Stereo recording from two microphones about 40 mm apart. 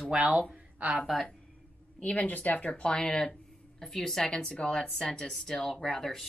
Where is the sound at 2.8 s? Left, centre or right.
Centre.